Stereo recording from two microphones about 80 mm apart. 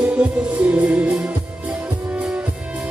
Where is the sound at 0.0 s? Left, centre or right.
Centre.